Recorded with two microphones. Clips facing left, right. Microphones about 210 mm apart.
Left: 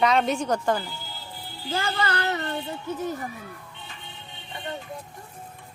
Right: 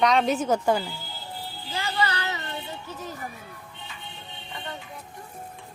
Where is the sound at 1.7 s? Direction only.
50° left (ahead or behind).